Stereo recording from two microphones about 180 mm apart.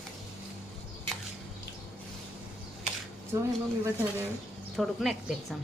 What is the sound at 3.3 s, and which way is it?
Speech, 15° right (ahead or behind).